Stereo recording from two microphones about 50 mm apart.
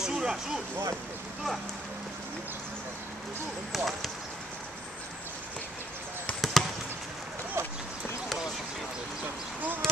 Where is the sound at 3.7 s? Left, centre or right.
Centre.